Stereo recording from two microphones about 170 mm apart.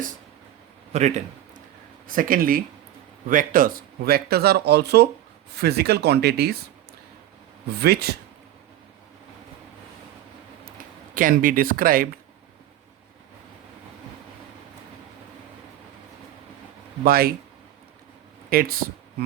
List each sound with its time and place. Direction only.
0.9 s a man's voice: 40° right (ahead or behind)
2.0 s speech: 55° right (ahead or behind)
7.8 s speech: 70° right (ahead or behind)
11.1 s speech: 55° right (ahead or behind)
17.0 s speech: 60° right (ahead or behind)
18.5 s speech: 60° right (ahead or behind)